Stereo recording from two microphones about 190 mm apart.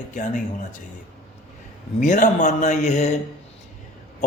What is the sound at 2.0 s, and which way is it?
Speech, 40° left (ahead or behind).